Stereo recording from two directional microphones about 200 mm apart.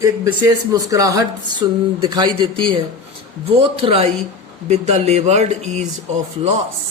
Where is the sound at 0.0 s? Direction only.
20° right (ahead or behind); by 5.8 s 35° right (ahead or behind).